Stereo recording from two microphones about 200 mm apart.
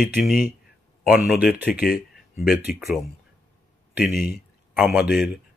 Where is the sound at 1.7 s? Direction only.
45° left (ahead or behind).